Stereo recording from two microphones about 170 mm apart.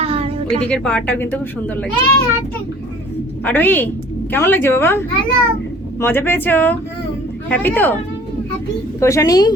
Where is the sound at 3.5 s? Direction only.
10° left (ahead or behind).